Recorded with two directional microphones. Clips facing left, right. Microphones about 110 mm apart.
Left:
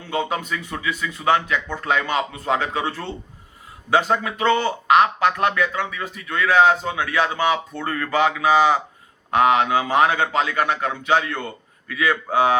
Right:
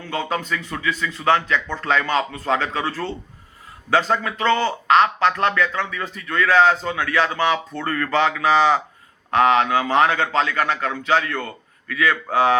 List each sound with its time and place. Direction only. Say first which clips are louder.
0.0 s a man's voice: left 1 dB; 20° left (ahead or behind)